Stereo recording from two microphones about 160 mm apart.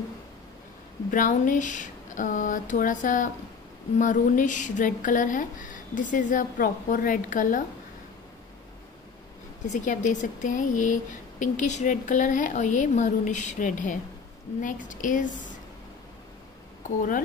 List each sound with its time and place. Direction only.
1.1 s speech: 55° left (ahead or behind)
9.7 s speech: 50° left (ahead or behind)